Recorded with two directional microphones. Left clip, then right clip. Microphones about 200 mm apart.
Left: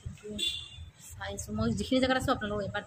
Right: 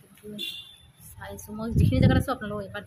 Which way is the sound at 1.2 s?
10° left (ahead or behind).